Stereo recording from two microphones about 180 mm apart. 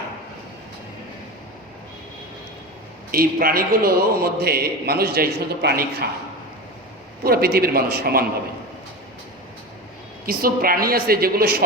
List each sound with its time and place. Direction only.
3.1 s a man's voice: 55° right (ahead or behind)
7.3 s a man's voice: 60° right (ahead or behind)
10.2 s a man's voice: 55° right (ahead or behind)